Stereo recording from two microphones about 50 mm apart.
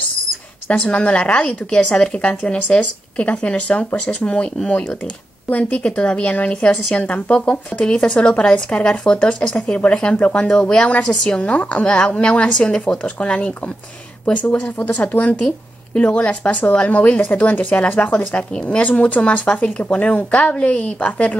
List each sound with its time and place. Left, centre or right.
0.7 s a woman's voice: left
5.5 s a woman's voice: left